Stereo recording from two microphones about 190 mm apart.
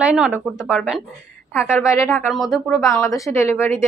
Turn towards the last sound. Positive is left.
turn(degrees=15)  # may be behind; listen again after turning